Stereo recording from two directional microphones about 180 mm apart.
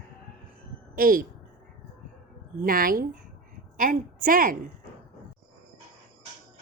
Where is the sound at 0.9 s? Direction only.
50° right (ahead or behind).